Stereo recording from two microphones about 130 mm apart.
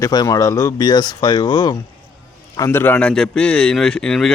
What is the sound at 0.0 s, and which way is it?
Speech, 30° left (ahead or behind).